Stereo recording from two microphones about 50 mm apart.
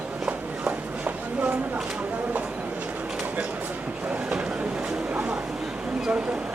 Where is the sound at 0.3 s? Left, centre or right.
Right.